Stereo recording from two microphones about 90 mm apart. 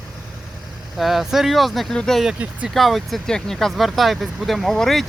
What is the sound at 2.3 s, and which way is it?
Speech, 10° right (ahead or behind).